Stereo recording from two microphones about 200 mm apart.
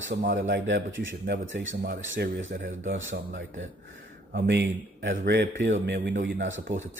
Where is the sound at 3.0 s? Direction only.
65° right (ahead or behind).